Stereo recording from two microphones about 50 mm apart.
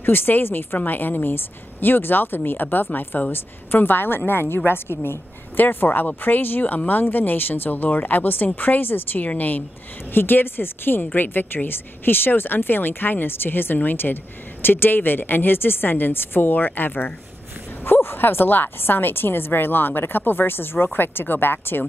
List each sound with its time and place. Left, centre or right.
0.0 s a woman's voice: left
5.6 s speech: left
10.1 s a woman's voice: left